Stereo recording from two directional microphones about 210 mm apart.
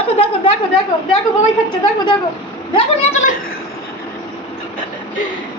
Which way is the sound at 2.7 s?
30° left (ahead or behind).